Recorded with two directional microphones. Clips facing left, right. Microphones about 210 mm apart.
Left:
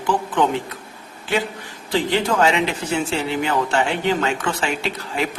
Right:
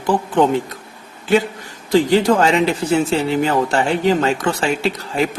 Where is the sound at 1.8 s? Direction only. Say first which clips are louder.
Right 7 dB; 40° right (ahead or behind).